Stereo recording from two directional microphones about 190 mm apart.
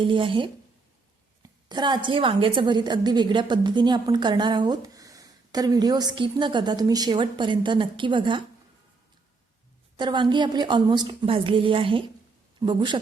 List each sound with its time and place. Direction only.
0.0 s a woman's voice: 25° right (ahead or behind)
10.0 s a woman's voice: 25° right (ahead or behind)